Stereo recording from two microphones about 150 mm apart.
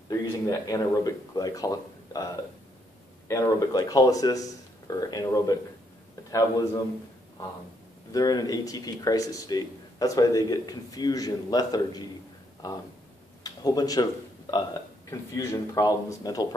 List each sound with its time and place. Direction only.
0.1 s speech: 25° left (ahead or behind)
3.3 s speech: 20° left (ahead or behind)
8.1 s speech: 25° left (ahead or behind)
13.4 s a sound: 25° left (ahead or behind)
14.5 s speech: 25° left (ahead or behind)